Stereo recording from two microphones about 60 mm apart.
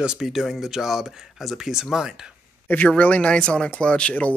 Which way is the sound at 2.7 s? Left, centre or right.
Left.